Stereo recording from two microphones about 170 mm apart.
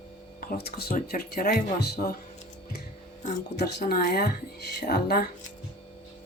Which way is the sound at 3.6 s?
70° left (ahead or behind).